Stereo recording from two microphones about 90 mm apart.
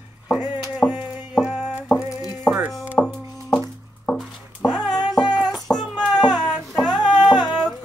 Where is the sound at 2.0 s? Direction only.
45° left (ahead or behind).